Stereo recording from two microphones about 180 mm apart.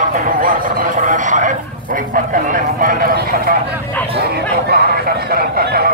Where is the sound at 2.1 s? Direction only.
50° right (ahead or behind).